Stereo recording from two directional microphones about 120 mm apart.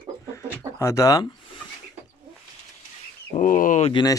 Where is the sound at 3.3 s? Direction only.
90° left.